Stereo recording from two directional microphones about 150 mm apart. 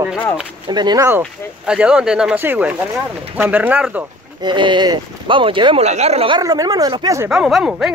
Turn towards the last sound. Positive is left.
turn(degrees=-5)  # may be behind; listen again after turning